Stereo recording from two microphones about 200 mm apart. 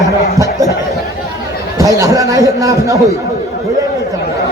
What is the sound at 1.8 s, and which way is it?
A man's voice, 15° right (ahead or behind).